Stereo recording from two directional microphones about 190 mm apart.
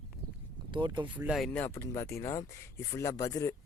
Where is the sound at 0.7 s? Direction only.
25° right (ahead or behind).